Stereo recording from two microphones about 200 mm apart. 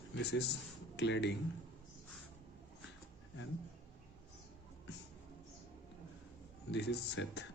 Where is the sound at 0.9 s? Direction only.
60° left (ahead or behind).